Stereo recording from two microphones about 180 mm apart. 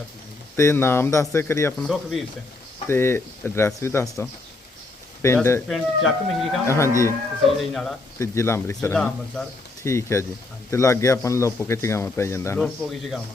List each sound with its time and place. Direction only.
0.5 s speech: 15° left (ahead or behind)
1.8 s speech: centre (ahead or behind)
2.8 s speech: 15° left (ahead or behind)
5.6 s speech: centre (ahead or behind)
6.7 s speech: 15° left (ahead or behind)
7.7 s speech: centre (ahead or behind)
8.2 s speech: 15° left (ahead or behind)
9.8 s speech: 15° left (ahead or behind)
12.5 s speech: centre (ahead or behind)